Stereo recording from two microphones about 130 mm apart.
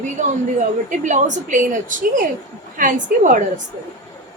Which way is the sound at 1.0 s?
70° right (ahead or behind).